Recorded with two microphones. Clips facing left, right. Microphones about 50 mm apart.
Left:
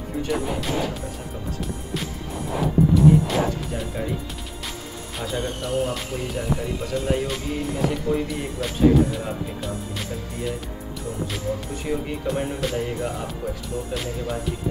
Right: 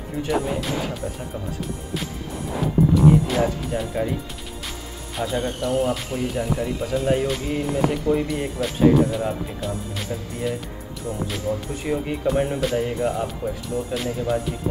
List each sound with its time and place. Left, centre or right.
2.9 s speech: centre
5.1 s speech: centre